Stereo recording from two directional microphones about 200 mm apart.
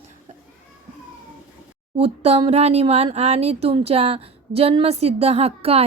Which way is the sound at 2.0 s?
30° right (ahead or behind).